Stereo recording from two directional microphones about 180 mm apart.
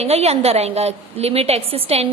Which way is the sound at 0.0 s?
35° right (ahead or behind).